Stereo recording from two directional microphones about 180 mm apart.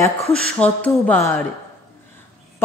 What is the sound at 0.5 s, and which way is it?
Speech, 10° left (ahead or behind).